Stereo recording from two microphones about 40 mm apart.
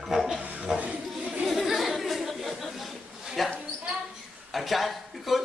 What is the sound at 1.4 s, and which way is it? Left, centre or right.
Chatter, centre.